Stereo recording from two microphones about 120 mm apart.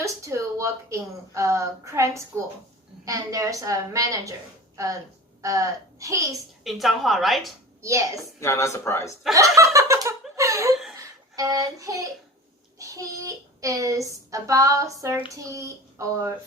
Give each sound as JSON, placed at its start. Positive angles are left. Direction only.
{"t": 0.0, "sound": "a woman's voice", "side_deg": -25}
{"t": 5.4, "sound": "a woman's voice", "side_deg": -25}
{"t": 6.7, "sound": "a woman's voice", "side_deg": 0}
{"t": 7.8, "sound": "a woman's voice", "side_deg": -25}
{"t": 8.2, "sound": "speech", "side_deg": 25}
{"t": 9.3, "sound": "laughter", "side_deg": -25}
{"t": 11.3, "sound": "speech", "side_deg": -30}